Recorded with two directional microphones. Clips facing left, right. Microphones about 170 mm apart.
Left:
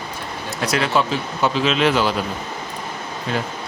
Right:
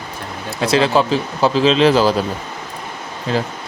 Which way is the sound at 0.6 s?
30° right (ahead or behind).